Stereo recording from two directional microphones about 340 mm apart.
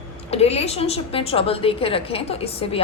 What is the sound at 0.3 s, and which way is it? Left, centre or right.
A woman's voice, centre.